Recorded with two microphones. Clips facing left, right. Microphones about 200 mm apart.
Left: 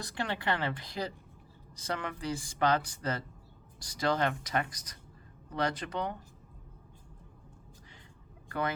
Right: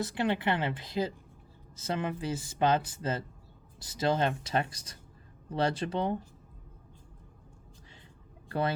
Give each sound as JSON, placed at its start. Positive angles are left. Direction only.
{"t": 0.0, "sound": "speech", "side_deg": -20}
{"t": 8.4, "sound": "speech", "side_deg": -30}